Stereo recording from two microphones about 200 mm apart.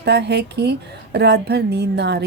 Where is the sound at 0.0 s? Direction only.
55° right (ahead or behind).